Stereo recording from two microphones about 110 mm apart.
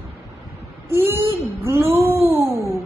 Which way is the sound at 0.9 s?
20° right (ahead or behind).